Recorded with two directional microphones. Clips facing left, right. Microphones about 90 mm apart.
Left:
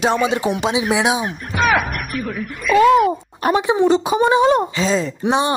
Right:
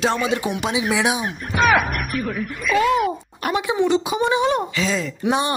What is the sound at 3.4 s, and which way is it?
Speech, 30° left (ahead or behind).